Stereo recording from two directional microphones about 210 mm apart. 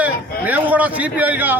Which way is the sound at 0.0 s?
5° right (ahead or behind).